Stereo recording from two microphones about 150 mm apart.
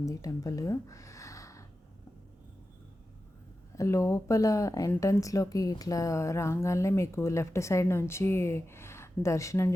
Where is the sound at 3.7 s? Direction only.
20° left (ahead or behind).